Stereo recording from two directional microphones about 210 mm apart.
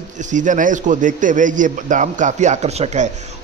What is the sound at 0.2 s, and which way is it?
A man's voice, 35° right (ahead or behind).